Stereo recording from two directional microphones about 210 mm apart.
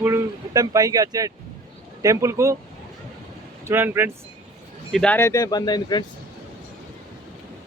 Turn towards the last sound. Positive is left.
turn(degrees=20)  # may be behind; listen again after turning